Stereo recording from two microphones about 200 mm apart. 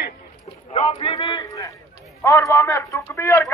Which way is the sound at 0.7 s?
25° left (ahead or behind).